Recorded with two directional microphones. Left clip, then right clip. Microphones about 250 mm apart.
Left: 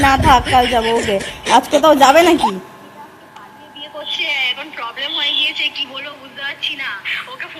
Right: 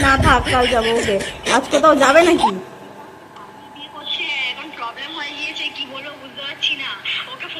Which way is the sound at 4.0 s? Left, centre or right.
Centre.